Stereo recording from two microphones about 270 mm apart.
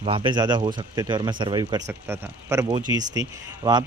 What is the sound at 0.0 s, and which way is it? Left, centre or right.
Speech, centre.